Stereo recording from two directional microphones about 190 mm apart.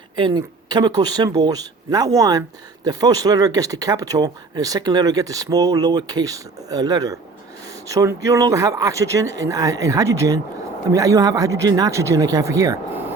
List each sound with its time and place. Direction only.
0.2 s speech: 20° right (ahead or behind)